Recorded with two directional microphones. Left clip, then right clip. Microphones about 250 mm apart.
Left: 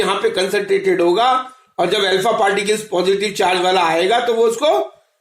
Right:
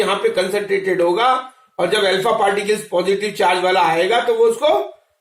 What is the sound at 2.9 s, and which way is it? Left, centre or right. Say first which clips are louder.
Speech: left 1 dB; left.